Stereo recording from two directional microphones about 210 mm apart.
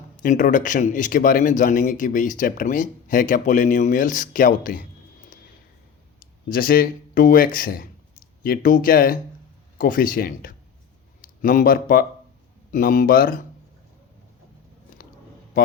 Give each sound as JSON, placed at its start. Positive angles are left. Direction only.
{"t": 0.2, "sound": "speech", "side_deg": 40}
{"t": 6.1, "sound": "speech", "side_deg": 45}